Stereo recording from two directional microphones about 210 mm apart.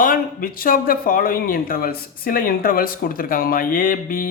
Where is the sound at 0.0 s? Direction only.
45° left (ahead or behind).